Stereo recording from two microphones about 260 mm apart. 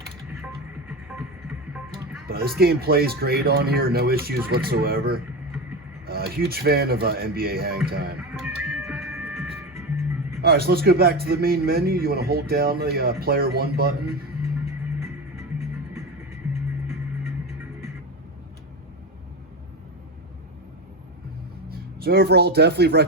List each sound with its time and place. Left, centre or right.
0.9 s music: centre
2.2 s a sound: right
2.6 s speech: right
8.3 s music: centre
10.4 s speech: right
14.6 s music: centre
21.7 s speech: right